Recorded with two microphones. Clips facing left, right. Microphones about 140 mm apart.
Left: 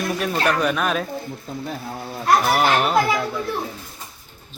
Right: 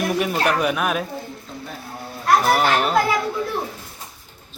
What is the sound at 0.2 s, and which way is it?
Speech, 10° right (ahead or behind).